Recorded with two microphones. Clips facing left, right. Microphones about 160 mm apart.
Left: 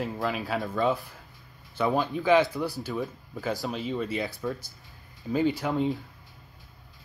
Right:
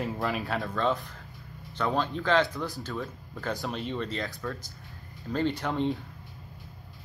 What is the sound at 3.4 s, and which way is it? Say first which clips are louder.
Speech: left 2 dB; centre (ahead or behind).